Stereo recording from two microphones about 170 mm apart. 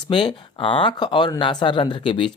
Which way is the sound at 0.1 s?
30° left (ahead or behind).